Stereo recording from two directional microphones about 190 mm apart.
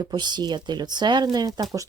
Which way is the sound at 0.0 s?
20° right (ahead or behind).